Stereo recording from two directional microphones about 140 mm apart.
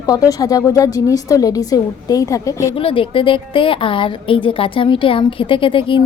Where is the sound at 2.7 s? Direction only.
40° left (ahead or behind).